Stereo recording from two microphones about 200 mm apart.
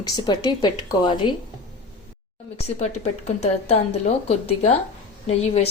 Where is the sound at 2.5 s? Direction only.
30° left (ahead or behind).